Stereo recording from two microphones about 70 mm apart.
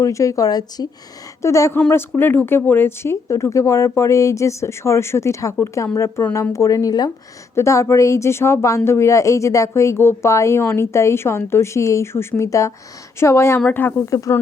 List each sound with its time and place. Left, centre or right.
0.0 s speech: left
1.4 s speech: left
1.9 s speech: left
7.5 s speech: left